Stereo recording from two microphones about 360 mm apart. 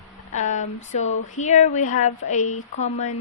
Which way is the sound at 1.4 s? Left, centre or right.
Centre.